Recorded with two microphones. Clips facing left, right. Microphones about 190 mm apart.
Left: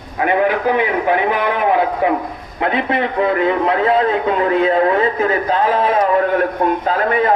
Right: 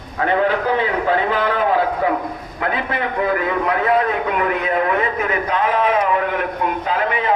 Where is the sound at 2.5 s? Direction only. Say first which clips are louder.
Left 5 dB; 25° left (ahead or behind); by 7.3 s 40° left (ahead or behind).